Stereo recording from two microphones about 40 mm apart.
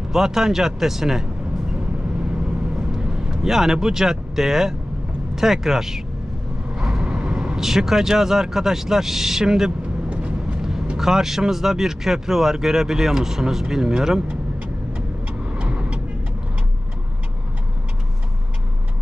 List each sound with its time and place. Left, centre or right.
0.1 s speech: centre
2.4 s vehicle: centre
3.4 s speech: centre
6.7 s vehicle: centre
7.6 s speech: centre
10.1 s vehicle: right
11.0 s speech: centre
15.5 s vehicle: right